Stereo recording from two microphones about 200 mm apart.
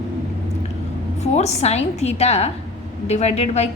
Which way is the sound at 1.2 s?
35° left (ahead or behind).